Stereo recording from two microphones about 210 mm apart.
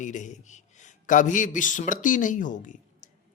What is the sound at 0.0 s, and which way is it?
A man's voice, 35° left (ahead or behind).